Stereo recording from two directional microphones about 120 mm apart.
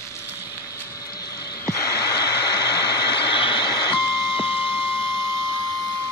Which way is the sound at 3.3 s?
40° left (ahead or behind).